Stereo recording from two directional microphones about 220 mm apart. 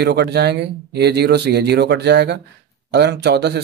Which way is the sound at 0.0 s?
50° right (ahead or behind).